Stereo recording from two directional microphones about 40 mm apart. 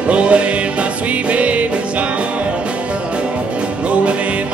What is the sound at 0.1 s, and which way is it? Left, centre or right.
Music, right.